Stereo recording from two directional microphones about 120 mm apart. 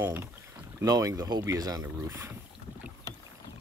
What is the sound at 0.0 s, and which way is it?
Speech, 20° right (ahead or behind).